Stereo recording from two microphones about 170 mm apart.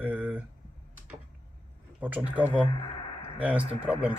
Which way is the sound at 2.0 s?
10° right (ahead or behind).